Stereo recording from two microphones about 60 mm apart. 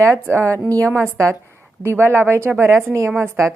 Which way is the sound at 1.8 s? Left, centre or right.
Right.